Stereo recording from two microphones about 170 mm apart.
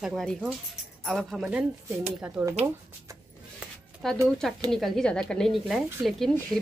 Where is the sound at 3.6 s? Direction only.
5° right (ahead or behind).